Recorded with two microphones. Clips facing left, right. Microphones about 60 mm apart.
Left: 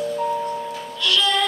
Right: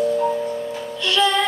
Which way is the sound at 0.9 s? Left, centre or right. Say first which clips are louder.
Right 2 dB; right.